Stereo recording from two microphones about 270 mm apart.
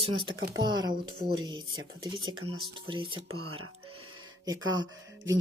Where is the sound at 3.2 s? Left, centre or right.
Right.